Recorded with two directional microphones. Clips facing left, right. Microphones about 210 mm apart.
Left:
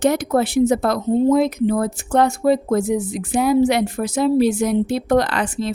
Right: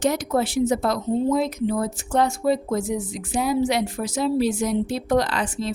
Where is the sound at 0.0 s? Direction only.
60° left (ahead or behind).